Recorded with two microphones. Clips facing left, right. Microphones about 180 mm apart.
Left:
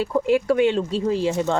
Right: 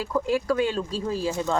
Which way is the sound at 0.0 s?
25° left (ahead or behind).